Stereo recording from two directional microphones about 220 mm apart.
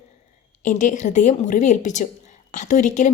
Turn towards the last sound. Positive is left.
turn(degrees=35)  # may be behind; listen again after turning